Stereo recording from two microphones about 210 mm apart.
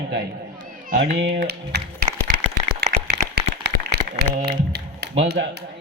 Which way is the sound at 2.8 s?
45° right (ahead or behind).